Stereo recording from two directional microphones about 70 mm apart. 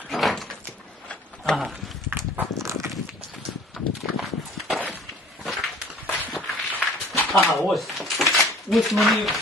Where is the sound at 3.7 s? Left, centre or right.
Centre.